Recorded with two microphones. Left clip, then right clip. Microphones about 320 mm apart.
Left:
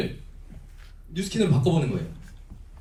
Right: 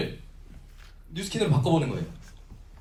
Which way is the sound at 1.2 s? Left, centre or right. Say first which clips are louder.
Left 2 dB; centre.